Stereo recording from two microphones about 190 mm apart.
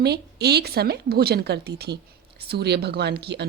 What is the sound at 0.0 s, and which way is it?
Speech, 60° right (ahead or behind).